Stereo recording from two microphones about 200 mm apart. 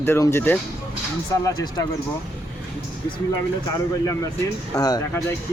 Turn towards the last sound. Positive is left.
turn(degrees=20)  # may be behind; listen again after turning